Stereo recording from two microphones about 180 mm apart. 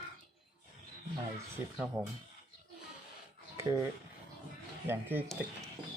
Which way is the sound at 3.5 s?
15° right (ahead or behind).